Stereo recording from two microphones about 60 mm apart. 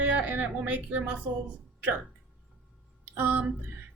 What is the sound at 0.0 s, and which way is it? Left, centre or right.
A woman's voice, right.